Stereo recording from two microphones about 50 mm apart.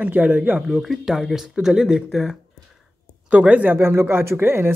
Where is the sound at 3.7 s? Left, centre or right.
Right.